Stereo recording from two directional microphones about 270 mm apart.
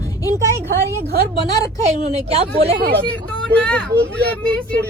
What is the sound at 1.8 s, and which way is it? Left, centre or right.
Speech, right.